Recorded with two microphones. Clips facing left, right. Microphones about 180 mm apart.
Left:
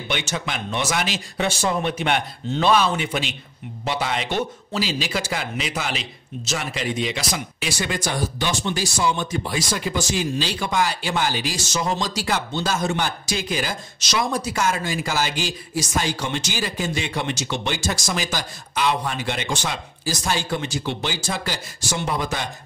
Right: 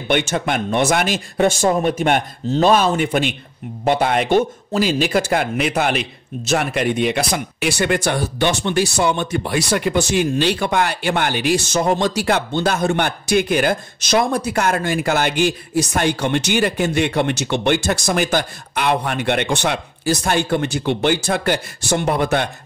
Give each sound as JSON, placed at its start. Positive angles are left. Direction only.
{"t": 0.1, "sound": "a man's voice", "side_deg": -55}